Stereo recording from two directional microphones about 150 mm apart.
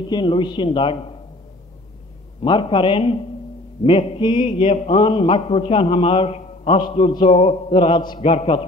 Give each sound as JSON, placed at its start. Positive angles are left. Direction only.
{"t": 0.1, "sound": "a man's voice", "side_deg": 30}
{"t": 2.4, "sound": "a man's voice", "side_deg": 30}